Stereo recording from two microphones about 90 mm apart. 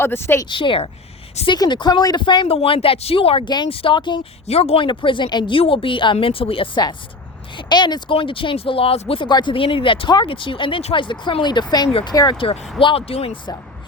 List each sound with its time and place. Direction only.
0.0 s speech: 25° left (ahead or behind)
0.4 s a woman's voice: 65° left (ahead or behind)
1.5 s speech: 50° left (ahead or behind); by 6.8 s 85° left
7.5 s a woman's voice: 55° left (ahead or behind)
8.1 s speech: 80° left
9.3 s speech: 65° left (ahead or behind)
12.8 s speech: 80° left